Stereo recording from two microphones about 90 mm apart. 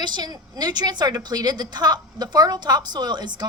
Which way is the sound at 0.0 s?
50° right (ahead or behind).